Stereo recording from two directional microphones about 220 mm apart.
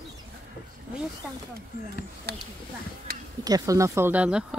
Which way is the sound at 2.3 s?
45° right (ahead or behind).